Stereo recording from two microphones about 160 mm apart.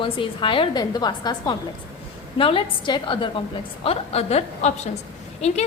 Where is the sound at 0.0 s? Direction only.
30° left (ahead or behind).